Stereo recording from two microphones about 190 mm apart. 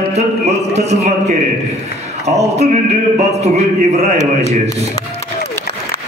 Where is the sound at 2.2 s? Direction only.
35° right (ahead or behind).